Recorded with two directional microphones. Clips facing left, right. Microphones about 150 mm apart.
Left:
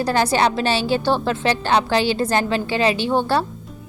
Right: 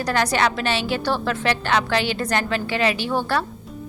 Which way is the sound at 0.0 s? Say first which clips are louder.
Left 3 dB; 30° left (ahead or behind).